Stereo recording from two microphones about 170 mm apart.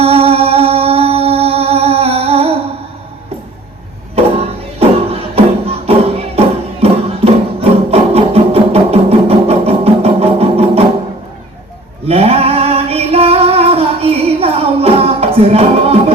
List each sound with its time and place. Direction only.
0.0 s music: 35° right (ahead or behind)
4.1 s music: 35° right (ahead or behind)
12.0 s female singing: 35° right (ahead or behind)
15.4 s music: 35° right (ahead or behind)